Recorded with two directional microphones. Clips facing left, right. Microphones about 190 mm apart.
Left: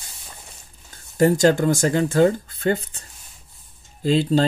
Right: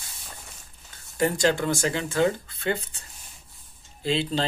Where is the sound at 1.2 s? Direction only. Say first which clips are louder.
Left 7 dB; 45° left (ahead or behind).